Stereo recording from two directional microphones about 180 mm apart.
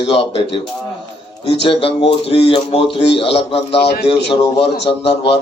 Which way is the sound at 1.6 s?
30° left (ahead or behind).